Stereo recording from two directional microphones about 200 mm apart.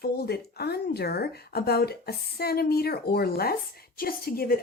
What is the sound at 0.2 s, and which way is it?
Speech, 50° left (ahead or behind).